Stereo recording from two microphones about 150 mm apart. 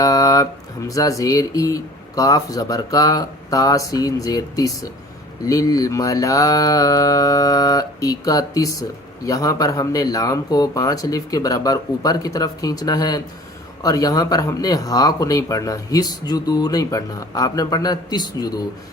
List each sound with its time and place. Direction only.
0.0 s mantra: 25° left (ahead or behind)